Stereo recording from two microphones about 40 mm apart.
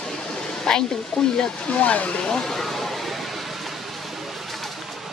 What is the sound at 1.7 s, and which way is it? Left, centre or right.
Speech, left.